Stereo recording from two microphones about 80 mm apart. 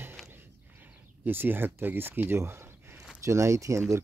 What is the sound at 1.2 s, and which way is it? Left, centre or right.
Speech, right.